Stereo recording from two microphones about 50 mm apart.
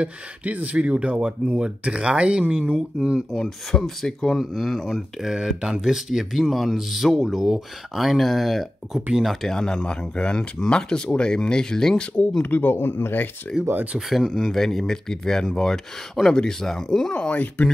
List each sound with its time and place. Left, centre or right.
0.0 s speech: right
3.4 s speech: centre
12.4 s speech: left
13.9 s speech: centre
14.5 s speech: centre
17.3 s speech: left